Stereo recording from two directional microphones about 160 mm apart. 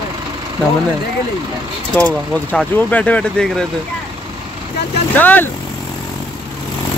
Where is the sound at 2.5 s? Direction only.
10° left (ahead or behind).